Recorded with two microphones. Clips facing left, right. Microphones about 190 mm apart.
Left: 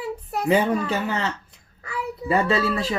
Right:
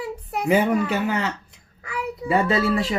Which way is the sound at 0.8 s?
15° right (ahead or behind).